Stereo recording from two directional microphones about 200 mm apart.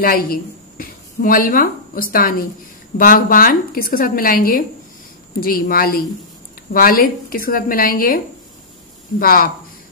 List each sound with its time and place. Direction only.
0.0 s a woman's voice: 45° left (ahead or behind)
9.2 s a woman's voice: 45° left (ahead or behind)